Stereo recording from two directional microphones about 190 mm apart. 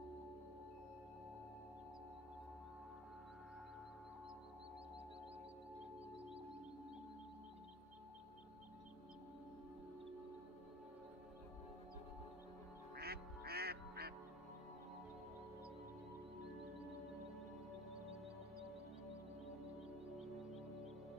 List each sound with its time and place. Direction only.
12.9 s quack: 55° right (ahead or behind)